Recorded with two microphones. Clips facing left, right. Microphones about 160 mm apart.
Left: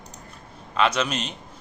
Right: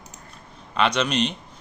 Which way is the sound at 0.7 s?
5° left (ahead or behind).